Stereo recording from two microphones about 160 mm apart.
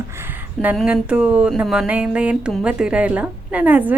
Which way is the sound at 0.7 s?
5° right (ahead or behind).